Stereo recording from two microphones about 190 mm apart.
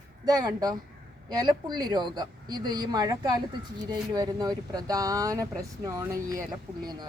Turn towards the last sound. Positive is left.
turn(degrees=-20)  # may be behind; listen again after turning